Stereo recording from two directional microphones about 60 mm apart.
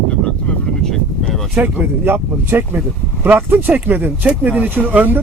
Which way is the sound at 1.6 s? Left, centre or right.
Right.